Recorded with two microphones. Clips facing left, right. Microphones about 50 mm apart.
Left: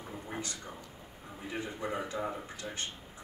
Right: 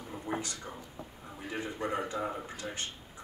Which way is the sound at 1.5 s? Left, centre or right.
Right.